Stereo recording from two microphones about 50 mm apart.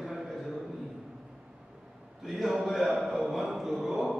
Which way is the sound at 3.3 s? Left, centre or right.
Centre.